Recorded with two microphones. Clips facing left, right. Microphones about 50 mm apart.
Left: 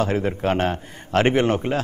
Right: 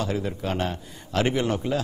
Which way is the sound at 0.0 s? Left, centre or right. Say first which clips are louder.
Left 6 dB; left.